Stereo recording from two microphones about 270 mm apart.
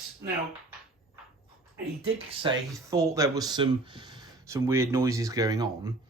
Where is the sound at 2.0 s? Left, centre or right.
Right.